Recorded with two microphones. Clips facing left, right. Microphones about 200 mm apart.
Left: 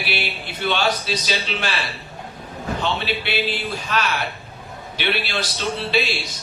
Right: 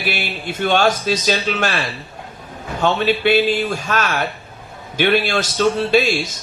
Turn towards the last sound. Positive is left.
turn(degrees=-45)  # may be behind; listen again after turning